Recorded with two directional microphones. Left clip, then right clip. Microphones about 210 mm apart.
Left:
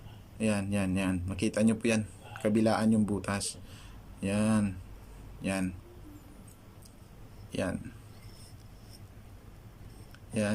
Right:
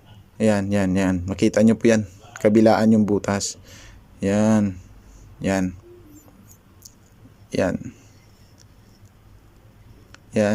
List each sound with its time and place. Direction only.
0.3 s speech: 35° right (ahead or behind)
7.5 s speech: 35° right (ahead or behind)
10.1 s a sound: 35° right (ahead or behind)